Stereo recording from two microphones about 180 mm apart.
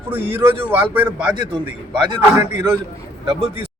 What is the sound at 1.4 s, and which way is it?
Speech, 25° right (ahead or behind).